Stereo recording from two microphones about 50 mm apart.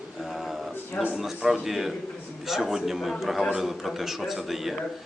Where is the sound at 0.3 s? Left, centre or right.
Centre.